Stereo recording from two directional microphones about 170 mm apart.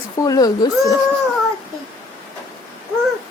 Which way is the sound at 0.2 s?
20° left (ahead or behind).